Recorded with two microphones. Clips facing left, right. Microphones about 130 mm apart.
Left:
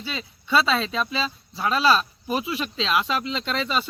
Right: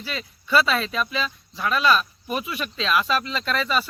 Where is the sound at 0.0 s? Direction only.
25° left (ahead or behind).